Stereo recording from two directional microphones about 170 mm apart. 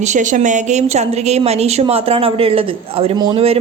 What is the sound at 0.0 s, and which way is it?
A woman's voice, 45° right (ahead or behind).